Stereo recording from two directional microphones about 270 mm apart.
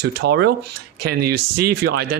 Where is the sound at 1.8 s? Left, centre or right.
Right.